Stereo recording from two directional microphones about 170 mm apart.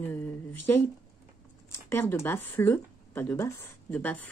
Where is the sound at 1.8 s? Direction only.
15° left (ahead or behind).